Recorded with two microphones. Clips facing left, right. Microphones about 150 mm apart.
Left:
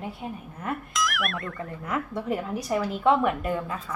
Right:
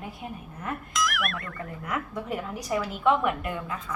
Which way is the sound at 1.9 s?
30° left (ahead or behind).